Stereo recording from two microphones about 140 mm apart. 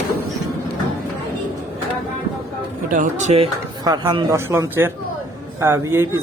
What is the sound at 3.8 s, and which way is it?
Speech, 30° right (ahead or behind).